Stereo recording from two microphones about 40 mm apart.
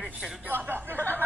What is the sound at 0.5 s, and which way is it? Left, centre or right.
Speech, right.